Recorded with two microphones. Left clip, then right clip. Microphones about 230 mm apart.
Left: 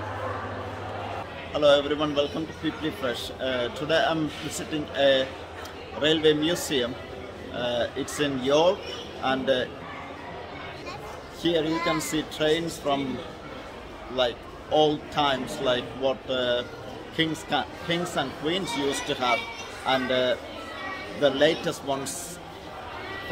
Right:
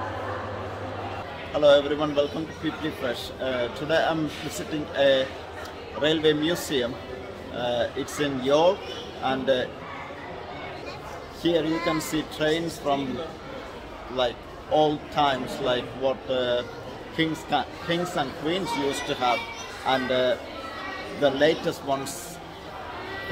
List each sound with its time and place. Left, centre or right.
1.5 s a man's voice: centre
11.7 s speech: left
12.0 s a man's voice: centre
14.1 s a man's voice: centre